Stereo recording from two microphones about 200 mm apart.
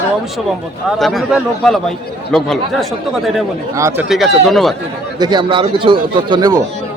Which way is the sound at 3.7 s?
15° right (ahead or behind).